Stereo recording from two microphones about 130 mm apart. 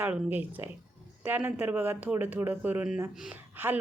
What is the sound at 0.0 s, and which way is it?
Speech, 15° right (ahead or behind).